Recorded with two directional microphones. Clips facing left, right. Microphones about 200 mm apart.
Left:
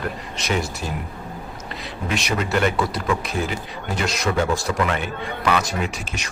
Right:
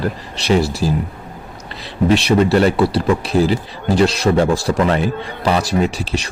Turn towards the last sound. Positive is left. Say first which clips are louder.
# right 9 dB
turn(degrees=-35)  # may be behind; listen again after turning